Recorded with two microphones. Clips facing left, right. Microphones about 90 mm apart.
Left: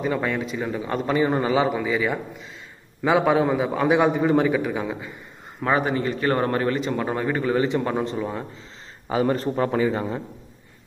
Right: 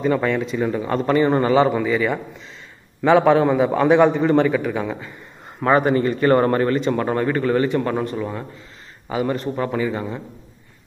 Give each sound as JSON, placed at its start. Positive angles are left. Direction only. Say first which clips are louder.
{"t": 0.0, "sound": "a man's voice", "louder": "right 5 dB", "side_deg": 5}
{"t": 9.1, "sound": "a man's voice", "louder": "left 1 dB", "side_deg": 30}